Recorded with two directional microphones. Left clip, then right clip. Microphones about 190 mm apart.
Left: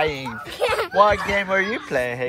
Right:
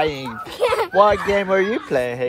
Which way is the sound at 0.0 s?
20° right (ahead or behind).